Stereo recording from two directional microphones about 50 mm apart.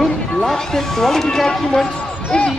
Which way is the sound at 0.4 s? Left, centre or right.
Centre.